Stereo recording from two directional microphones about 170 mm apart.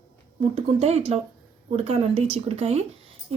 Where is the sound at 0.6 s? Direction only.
40° right (ahead or behind).